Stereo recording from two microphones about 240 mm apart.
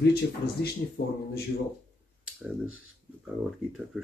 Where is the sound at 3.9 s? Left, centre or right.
Centre.